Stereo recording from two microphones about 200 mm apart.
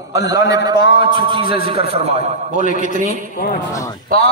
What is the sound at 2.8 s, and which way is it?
Speech, 40° right (ahead or behind).